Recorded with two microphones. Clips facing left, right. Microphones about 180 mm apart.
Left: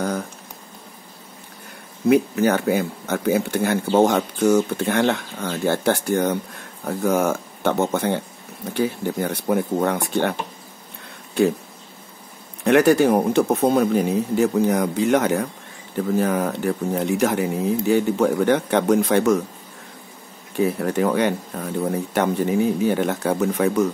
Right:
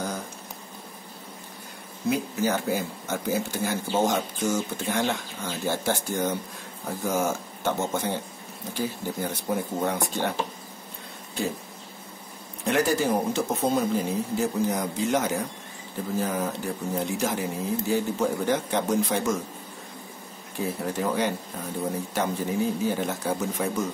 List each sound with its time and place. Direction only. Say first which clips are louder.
2.0 s speech: left 9 dB; 60° left (ahead or behind)
12.6 s speech: left 9 dB; 65° left (ahead or behind)
20.6 s speech: left 7 dB; 65° left (ahead or behind)